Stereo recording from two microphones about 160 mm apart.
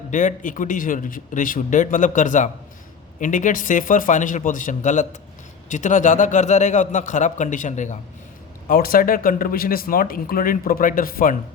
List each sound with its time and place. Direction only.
0.1 s a man's voice: 50° left (ahead or behind)
8.6 s speech: 65° left (ahead or behind)